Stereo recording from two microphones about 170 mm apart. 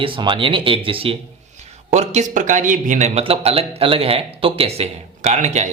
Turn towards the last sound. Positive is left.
turn(degrees=-45)  # may be behind; listen again after turning